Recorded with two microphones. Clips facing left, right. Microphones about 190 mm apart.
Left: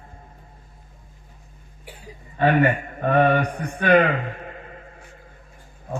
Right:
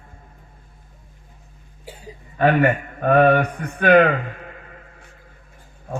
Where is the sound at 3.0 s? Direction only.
50° right (ahead or behind).